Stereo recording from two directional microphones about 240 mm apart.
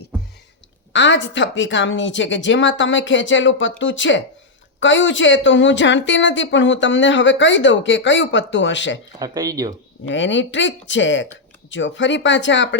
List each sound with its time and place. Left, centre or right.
0.9 s a woman's voice: left
9.1 s speech: centre
10.1 s a woman's voice: left